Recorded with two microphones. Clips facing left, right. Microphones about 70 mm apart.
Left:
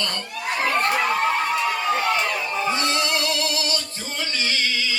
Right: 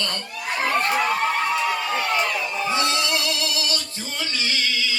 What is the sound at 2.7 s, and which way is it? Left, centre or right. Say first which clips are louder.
Male singing: even; left.